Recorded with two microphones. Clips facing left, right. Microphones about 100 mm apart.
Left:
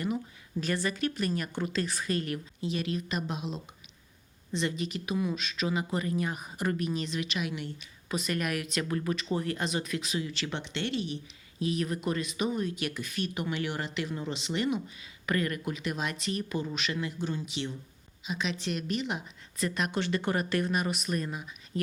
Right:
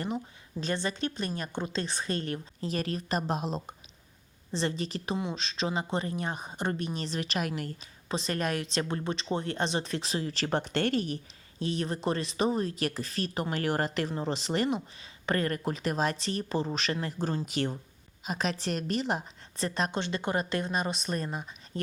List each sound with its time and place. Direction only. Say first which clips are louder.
0.6 s a woman's voice: left 1 dB; 25° right (ahead or behind); by 7.7 s 45° right (ahead or behind)
7.8 s speech: even; 30° right (ahead or behind)
11.6 s speech: even; 30° right (ahead or behind)